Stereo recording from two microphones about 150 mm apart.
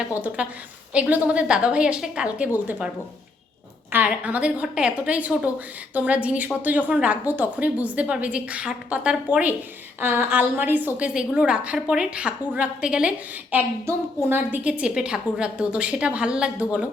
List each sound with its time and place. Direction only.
0.1 s a woman's voice: 10° right (ahead or behind)
3.9 s a woman's voice: 10° right (ahead or behind)
13.9 s a woman's voice: 20° right (ahead or behind)